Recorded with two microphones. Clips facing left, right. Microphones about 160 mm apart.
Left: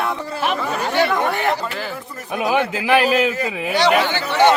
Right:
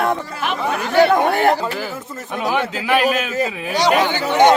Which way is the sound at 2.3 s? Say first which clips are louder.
Left 2 dB; 15° left (ahead or behind).